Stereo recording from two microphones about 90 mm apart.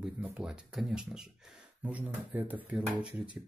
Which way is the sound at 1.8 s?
20° right (ahead or behind).